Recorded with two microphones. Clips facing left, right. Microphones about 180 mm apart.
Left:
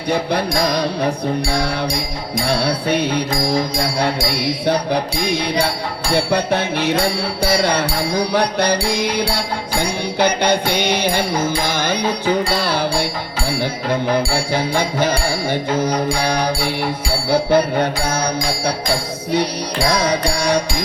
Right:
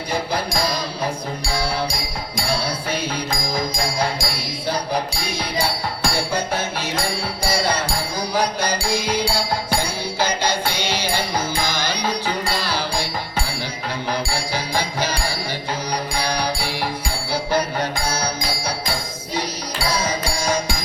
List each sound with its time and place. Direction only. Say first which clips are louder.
0.1 s music: left 6 dB; 65° left (ahead or behind)
6.1 s music: left 10 dB; 65° left (ahead or behind)
14.1 s music: left 4 dB; 55° left (ahead or behind)
19.9 s music: left 5 dB; 65° left (ahead or behind)